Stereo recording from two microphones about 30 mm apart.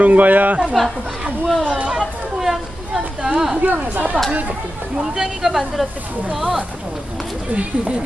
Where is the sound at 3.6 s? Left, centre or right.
Right.